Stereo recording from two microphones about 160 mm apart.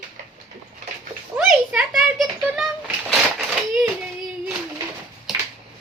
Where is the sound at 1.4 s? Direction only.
5° right (ahead or behind).